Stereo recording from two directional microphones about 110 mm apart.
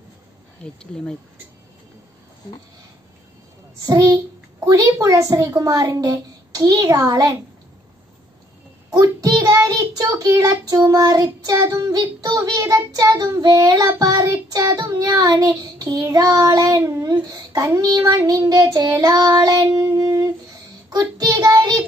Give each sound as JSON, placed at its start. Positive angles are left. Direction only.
{"t": 0.6, "sound": "speech", "side_deg": 10}
{"t": 3.8, "sound": "child singing", "side_deg": -35}
{"t": 4.6, "sound": "a woman's voice", "side_deg": -25}
{"t": 6.6, "sound": "child singing", "side_deg": -35}
{"t": 8.9, "sound": "a child's voice", "side_deg": -30}
{"t": 9.3, "sound": "child singing", "side_deg": -35}
{"t": 19.7, "sound": "music", "side_deg": -30}
{"t": 20.9, "sound": "child singing", "side_deg": -40}